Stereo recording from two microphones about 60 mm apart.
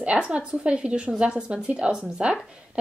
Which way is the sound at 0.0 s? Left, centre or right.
Centre.